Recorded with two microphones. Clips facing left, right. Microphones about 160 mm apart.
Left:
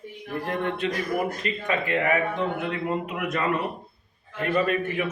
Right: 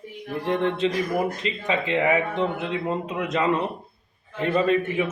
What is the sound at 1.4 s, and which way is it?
A man's voice, 20° right (ahead or behind).